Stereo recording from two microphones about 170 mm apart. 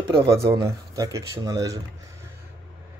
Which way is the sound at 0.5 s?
20° right (ahead or behind).